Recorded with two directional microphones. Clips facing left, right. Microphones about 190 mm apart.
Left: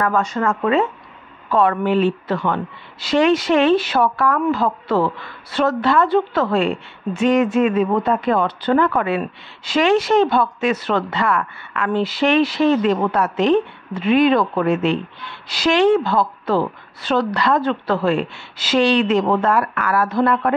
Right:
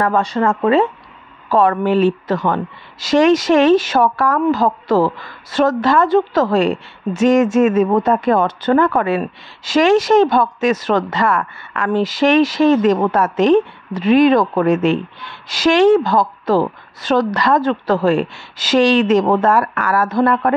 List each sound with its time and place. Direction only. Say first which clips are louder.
0.0 s a woman's voice: right 3 dB; 35° right (ahead or behind)